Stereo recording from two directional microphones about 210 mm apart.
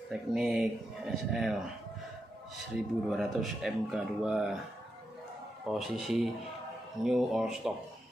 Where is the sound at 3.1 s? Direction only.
Centre (ahead or behind).